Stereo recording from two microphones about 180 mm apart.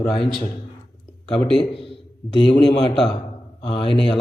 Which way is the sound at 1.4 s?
Centre (ahead or behind).